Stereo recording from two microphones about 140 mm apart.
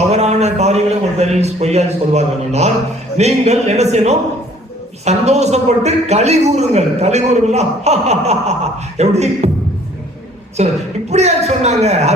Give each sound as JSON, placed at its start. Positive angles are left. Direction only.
{"t": 0.1, "sound": "a sound", "side_deg": -50}
{"t": 1.2, "sound": "a man's voice", "side_deg": -50}
{"t": 10.6, "sound": "a man's voice", "side_deg": -50}